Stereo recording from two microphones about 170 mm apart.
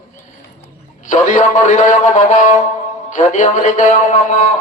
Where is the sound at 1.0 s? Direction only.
45° left (ahead or behind).